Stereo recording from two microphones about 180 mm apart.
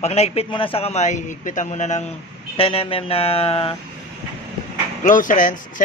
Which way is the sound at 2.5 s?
30° left (ahead or behind).